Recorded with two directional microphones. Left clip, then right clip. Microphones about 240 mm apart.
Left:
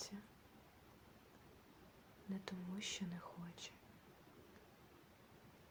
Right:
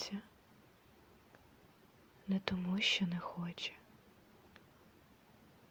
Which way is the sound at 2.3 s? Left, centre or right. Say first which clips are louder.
Right 11 dB; right.